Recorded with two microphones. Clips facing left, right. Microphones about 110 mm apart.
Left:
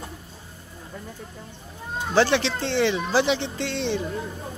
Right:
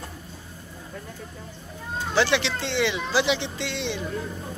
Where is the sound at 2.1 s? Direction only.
40° left (ahead or behind).